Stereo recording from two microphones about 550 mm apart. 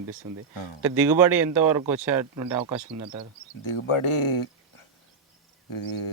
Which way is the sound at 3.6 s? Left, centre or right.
Left.